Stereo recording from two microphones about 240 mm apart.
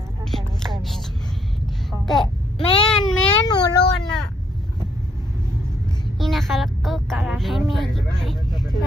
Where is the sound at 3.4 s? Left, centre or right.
Centre.